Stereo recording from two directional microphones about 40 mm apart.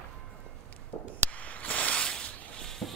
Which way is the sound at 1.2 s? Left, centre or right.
Left.